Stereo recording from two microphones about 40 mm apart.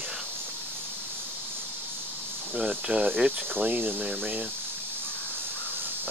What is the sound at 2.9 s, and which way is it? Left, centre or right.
Speech, right.